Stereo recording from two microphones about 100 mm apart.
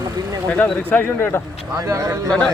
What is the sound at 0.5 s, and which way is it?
Speech, 20° left (ahead or behind).